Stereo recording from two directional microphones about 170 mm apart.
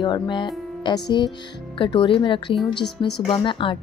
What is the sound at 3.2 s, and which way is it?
Speech, 30° left (ahead or behind).